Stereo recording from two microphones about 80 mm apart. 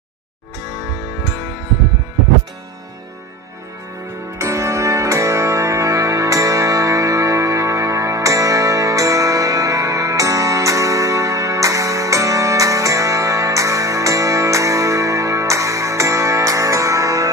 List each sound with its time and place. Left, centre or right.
4.4 s music: right